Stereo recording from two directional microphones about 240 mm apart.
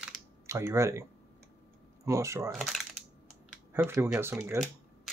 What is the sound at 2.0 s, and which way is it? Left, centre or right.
Speech, centre.